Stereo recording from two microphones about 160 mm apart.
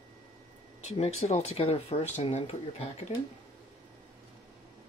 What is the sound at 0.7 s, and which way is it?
Speech, 45° left (ahead or behind).